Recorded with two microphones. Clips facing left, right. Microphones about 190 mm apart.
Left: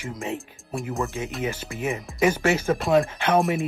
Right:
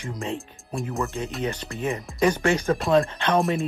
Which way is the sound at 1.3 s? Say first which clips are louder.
Even; 5° left (ahead or behind).